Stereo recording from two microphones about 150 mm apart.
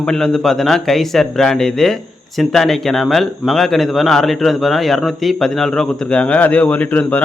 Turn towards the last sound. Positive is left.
turn(degrees=10)  # may be behind; listen again after turning